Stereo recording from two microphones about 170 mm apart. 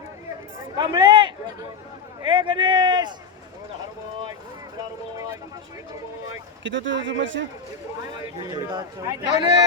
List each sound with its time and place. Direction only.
0.8 s speech: 25° right (ahead or behind)
6.6 s a man's voice: 90° right
8.4 s speech: 20° right (ahead or behind)